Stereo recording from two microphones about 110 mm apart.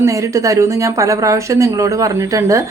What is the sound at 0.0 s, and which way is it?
A woman's voice, 30° right (ahead or behind).